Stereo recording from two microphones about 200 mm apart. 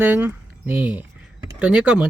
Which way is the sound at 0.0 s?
10° right (ahead or behind).